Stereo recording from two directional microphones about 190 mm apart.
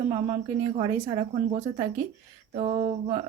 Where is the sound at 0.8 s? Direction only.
25° right (ahead or behind).